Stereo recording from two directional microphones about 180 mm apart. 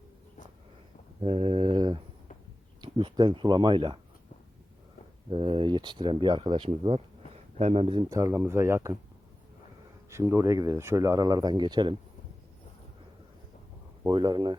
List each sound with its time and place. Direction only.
1.2 s mantra: 30° right (ahead or behind)
2.8 s speech: 25° right (ahead or behind)
5.3 s speech: 30° right (ahead or behind)
8.1 s speech: 15° right (ahead or behind)
10.1 s speech: 15° right (ahead or behind)
14.0 s speech: 25° right (ahead or behind)